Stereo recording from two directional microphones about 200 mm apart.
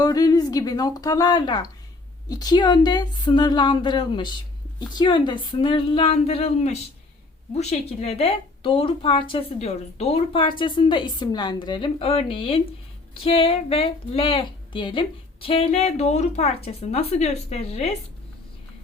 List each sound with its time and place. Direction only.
0.0 s a woman's voice: 20° left (ahead or behind)